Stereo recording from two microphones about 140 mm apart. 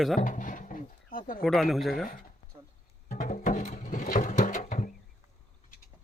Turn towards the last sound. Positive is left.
turn(degrees=65)  # may be behind; listen again after turning